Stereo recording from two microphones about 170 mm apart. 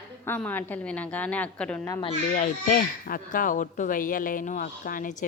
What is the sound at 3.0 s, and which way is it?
A man's voice, 55° left (ahead or behind).